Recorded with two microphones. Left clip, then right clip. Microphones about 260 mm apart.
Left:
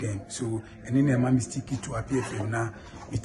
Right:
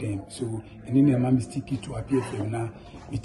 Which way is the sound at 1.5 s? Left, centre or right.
Left.